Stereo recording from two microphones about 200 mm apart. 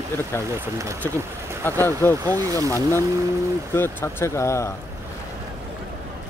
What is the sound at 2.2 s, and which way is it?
Speech, 15° right (ahead or behind).